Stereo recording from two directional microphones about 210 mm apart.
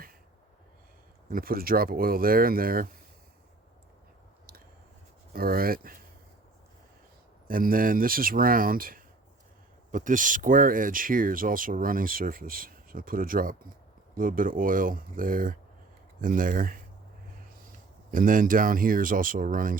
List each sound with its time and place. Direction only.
1.3 s speech: 45° right (ahead or behind)
5.3 s speech: 45° right (ahead or behind)
7.4 s speech: 40° right (ahead or behind)
18.1 s speech: 40° right (ahead or behind)